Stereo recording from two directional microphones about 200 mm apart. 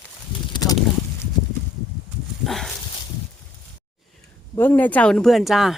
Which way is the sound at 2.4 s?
Centre (ahead or behind).